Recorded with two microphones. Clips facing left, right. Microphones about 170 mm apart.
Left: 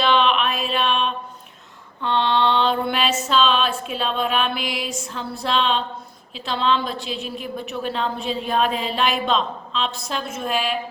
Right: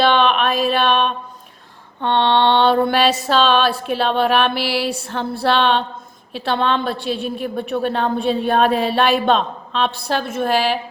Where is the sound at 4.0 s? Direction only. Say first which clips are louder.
Right 6 dB; 70° right (ahead or behind).